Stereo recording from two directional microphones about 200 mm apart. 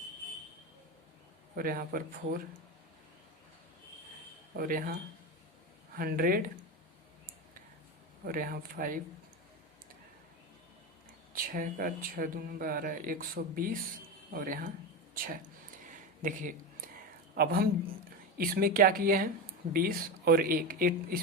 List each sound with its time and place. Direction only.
1.5 s speech: 45° right (ahead or behind)
4.5 s speech: 50° right (ahead or behind)
8.2 s speech: 45° right (ahead or behind)
11.3 s speech: 45° right (ahead or behind)